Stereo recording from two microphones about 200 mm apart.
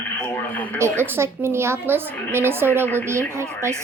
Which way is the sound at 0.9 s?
10° right (ahead or behind).